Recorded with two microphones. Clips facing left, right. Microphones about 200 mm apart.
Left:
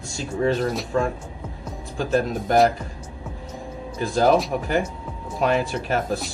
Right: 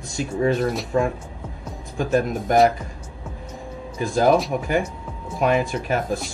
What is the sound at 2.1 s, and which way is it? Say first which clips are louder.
Speech: right 1 dB; 5° right (ahead or behind).